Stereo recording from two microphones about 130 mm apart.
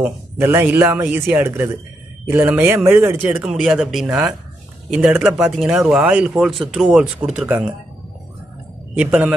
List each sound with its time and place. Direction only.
0.0 s a man's voice: 15° right (ahead or behind)
3.4 s a man's voice: 5° right (ahead or behind)
8.9 s a man's voice: 10° right (ahead or behind)